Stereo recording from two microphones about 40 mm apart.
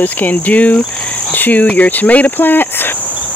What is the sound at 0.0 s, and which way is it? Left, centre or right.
Cricket, left.